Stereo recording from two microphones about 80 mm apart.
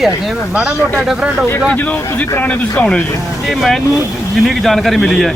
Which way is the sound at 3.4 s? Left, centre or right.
Centre.